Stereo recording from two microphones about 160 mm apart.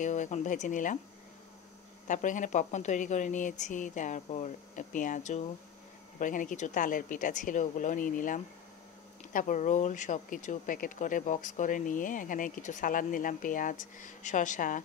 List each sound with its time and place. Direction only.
0.0 s a woman's voice: 50° left (ahead or behind)
2.0 s a woman's voice: 50° left (ahead or behind)